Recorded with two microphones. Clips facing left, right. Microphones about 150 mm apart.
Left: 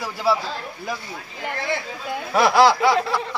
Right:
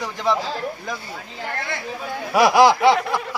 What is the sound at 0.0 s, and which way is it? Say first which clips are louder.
Speech: even; 5° left (ahead or behind).